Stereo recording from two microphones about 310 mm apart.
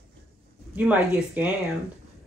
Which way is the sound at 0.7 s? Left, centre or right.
Centre.